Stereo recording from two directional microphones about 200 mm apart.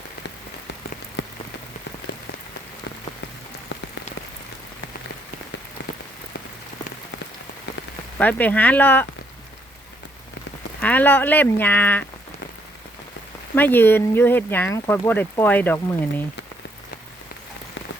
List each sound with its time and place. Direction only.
1.2 s rain on surface: 65° left (ahead or behind)
8.2 s speech: 10° left (ahead or behind)
10.8 s speech: 10° left (ahead or behind)
13.6 s speech: 10° left (ahead or behind)